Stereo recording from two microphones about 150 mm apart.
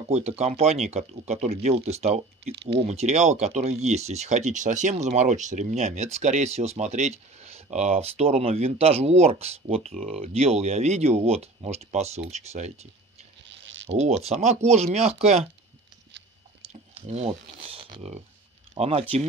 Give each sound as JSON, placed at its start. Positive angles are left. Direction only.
{"t": 0.1, "sound": "speech", "side_deg": -45}
{"t": 13.8, "sound": "speech", "side_deg": -50}
{"t": 16.6, "sound": "speech", "side_deg": -45}